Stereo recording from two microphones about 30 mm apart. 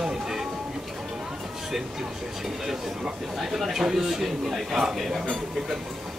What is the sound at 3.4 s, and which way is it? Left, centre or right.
Speech, centre.